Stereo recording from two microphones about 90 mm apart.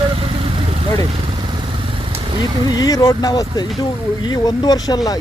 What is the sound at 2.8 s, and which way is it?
Speech, 45° left (ahead or behind).